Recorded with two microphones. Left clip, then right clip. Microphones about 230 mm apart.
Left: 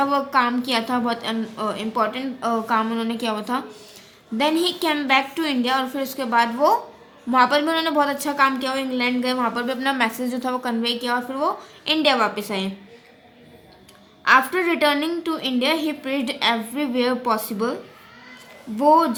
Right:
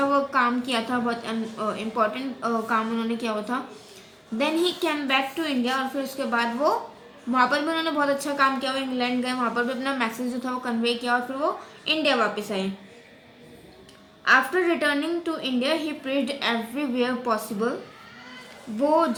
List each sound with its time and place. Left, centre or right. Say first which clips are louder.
0.1 s a woman's voice: left 2 dB; left
14.3 s a woman's voice: left 3 dB; left
18.8 s speech: left 5 dB; left